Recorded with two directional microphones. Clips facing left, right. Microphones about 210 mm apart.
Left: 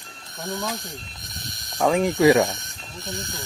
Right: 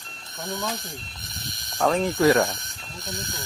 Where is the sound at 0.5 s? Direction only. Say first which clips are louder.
Left 1 dB; centre (ahead or behind).